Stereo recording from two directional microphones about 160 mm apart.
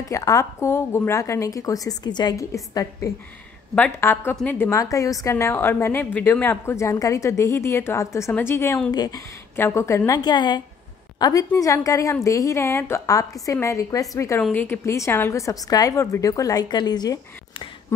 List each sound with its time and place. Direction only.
0.1 s a woman's voice: 20° left (ahead or behind)
3.7 s a woman's voice: 10° left (ahead or behind)
8.9 s a woman's voice: 25° left (ahead or behind)